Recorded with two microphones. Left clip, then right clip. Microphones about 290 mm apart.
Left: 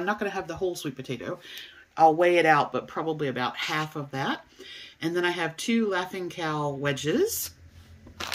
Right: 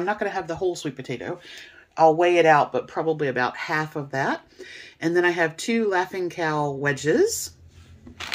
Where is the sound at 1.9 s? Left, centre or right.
Left.